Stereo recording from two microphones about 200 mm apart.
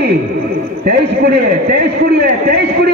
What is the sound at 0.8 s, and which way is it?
A man's voice, 50° right (ahead or behind).